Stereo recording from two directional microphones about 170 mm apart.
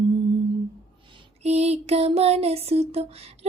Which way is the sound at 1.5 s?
40° right (ahead or behind).